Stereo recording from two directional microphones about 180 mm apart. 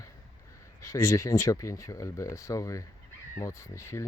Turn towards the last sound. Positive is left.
turn(degrees=15)  # may be behind; listen again after turning